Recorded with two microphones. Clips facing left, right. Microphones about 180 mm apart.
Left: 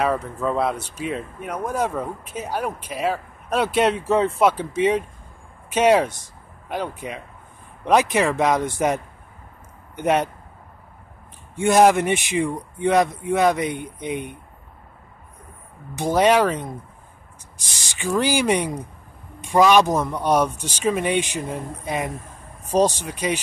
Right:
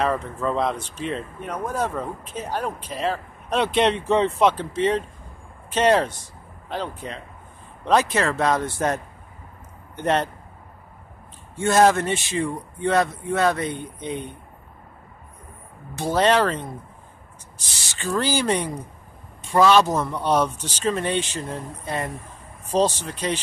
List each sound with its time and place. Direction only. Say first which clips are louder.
0.0 s speech: left 1 dB; 5° left (ahead or behind)
11.5 s speech: left 2 dB; 15° left (ahead or behind)
15.9 s speech: left 2 dB; 15° left (ahead or behind)
17.6 s speech: left 2 dB; 15° left (ahead or behind)